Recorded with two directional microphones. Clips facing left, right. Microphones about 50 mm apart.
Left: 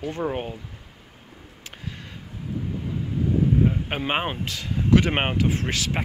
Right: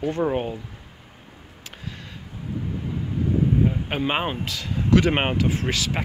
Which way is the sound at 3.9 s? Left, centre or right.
Left.